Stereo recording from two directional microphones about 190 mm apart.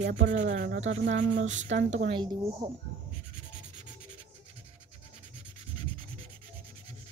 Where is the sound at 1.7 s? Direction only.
70° right (ahead or behind).